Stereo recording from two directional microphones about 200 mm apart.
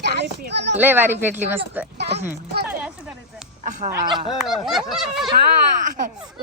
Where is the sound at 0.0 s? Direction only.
60° right (ahead or behind).